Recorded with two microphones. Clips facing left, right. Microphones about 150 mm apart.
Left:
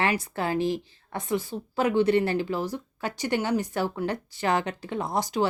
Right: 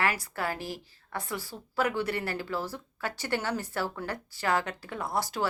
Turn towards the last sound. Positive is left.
turn(degrees=20)  # may be behind; listen again after turning